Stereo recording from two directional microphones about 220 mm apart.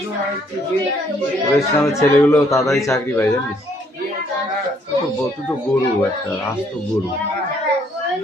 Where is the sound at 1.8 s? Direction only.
10° left (ahead or behind).